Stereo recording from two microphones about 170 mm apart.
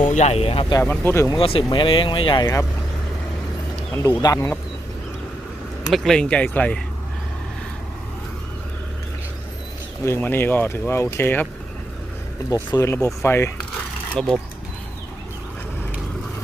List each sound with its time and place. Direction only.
0.1 s speech: 40° left (ahead or behind)
0.8 s speech: 10° left (ahead or behind)
1.4 s speech: 35° left (ahead or behind)
3.9 s speech: 10° left (ahead or behind)
5.9 s speech: centre (ahead or behind)
10.0 s speech: 15° left (ahead or behind)
12.7 s speech: 15° left (ahead or behind)
14.2 s speech: 30° right (ahead or behind)